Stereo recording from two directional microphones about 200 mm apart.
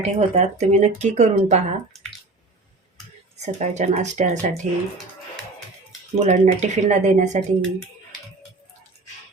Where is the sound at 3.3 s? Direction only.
35° right (ahead or behind).